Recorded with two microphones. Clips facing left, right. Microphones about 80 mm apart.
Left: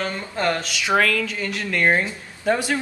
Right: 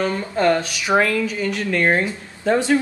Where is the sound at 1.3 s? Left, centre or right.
Centre.